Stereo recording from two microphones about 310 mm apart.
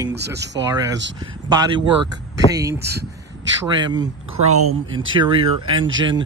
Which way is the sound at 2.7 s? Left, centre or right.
Right.